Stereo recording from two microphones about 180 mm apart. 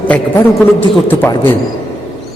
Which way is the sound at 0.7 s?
10° left (ahead or behind).